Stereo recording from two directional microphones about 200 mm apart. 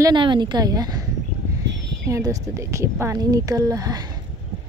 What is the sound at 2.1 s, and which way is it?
Speech, 15° right (ahead or behind).